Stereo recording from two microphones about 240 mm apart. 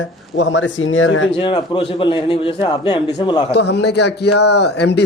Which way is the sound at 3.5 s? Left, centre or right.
Left.